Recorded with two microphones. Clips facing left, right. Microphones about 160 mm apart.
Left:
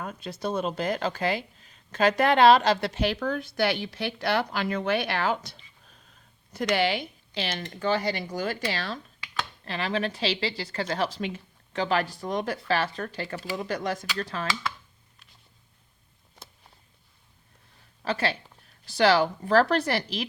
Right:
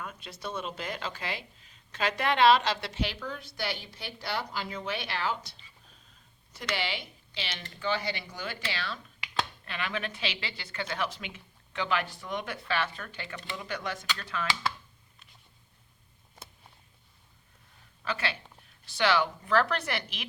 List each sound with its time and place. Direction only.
0.0 s a woman's voice: 40° left (ahead or behind); by 5.5 s 55° left (ahead or behind)
6.7 s a woman's voice: 50° left (ahead or behind)
18.0 s a woman's voice: 35° left (ahead or behind)